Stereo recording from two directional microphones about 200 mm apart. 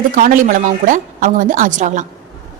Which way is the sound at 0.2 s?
40° right (ahead or behind).